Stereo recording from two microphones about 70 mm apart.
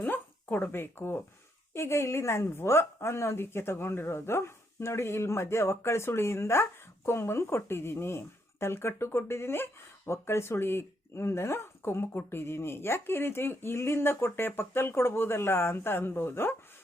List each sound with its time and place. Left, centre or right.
0.0 s a woman's voice: left